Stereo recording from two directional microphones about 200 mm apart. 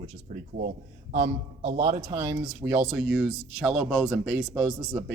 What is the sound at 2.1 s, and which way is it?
Speech, 15° right (ahead or behind).